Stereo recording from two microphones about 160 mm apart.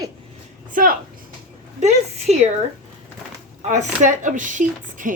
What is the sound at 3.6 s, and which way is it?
Speech, 45° right (ahead or behind).